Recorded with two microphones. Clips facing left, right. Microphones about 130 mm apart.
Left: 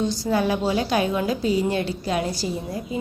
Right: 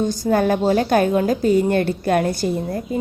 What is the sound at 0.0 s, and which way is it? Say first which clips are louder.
A woman's voice: right 4 dB; 50° right (ahead or behind).